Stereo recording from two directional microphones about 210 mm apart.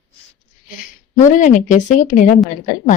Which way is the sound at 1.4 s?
35° left (ahead or behind).